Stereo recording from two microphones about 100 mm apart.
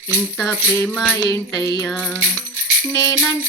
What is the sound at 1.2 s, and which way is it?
Music, 40° left (ahead or behind).